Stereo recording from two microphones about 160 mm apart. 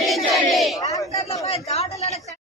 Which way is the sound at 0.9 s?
40° left (ahead or behind).